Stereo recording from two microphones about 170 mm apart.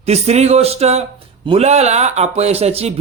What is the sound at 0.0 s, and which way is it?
Speech, 40° right (ahead or behind).